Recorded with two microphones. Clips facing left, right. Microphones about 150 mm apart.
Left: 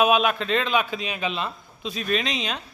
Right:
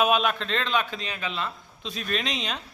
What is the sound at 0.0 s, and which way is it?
A man's voice, 5° left (ahead or behind).